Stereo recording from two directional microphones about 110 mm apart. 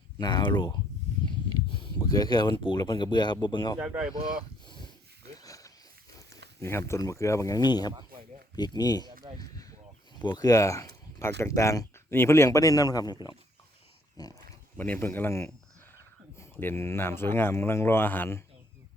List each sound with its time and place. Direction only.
0.2 s speech: 40° left (ahead or behind)
2.0 s speech: 35° left (ahead or behind)
3.8 s speech: 10° right (ahead or behind)
4.6 s wheeze: 45° left (ahead or behind)
6.1 s speech: 30° left (ahead or behind)
9.4 s a sound: 35° left (ahead or behind)
10.3 s speech: 35° left (ahead or behind)
14.8 s speech: 15° left (ahead or behind)